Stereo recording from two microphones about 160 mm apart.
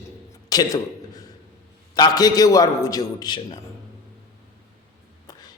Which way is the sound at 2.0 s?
25° left (ahead or behind).